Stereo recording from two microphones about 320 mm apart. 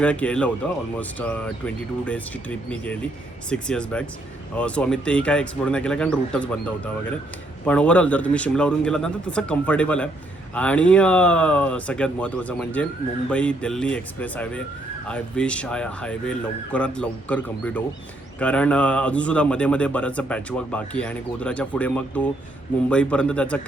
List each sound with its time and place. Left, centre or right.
0.0 s speech: centre